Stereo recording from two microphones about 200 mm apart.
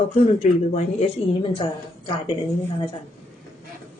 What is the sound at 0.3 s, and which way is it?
Speech, 30° left (ahead or behind).